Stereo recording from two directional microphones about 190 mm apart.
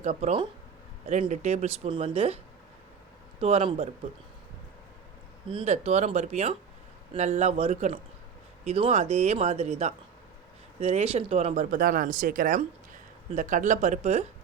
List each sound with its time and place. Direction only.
0.0 s speech: 35° right (ahead or behind)
3.4 s speech: 30° right (ahead or behind)
5.5 s speech: 30° right (ahead or behind)